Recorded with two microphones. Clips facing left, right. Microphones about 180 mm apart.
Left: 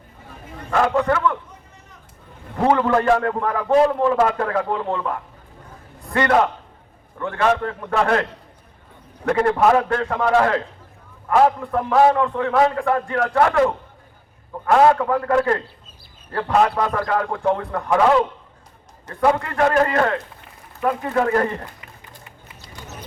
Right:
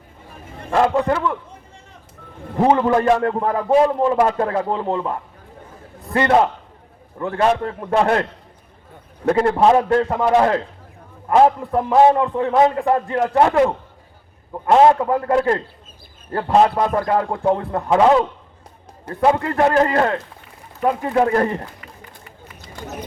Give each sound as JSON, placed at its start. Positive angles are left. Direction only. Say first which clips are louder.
{"t": 0.7, "sound": "a man's voice", "louder": "right 2 dB", "side_deg": -30}
{"t": 2.6, "sound": "a man's voice", "louder": "right 1 dB", "side_deg": -25}
{"t": 6.1, "sound": "a man's voice", "louder": "right 2 dB", "side_deg": -25}
{"t": 9.2, "sound": "a man's voice", "louder": "right 2 dB", "side_deg": -30}
{"t": 14.7, "sound": "a man's voice", "louder": "right 2 dB", "side_deg": -25}